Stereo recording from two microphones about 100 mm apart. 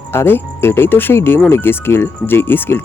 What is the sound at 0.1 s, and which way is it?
Speech, 25° left (ahead or behind).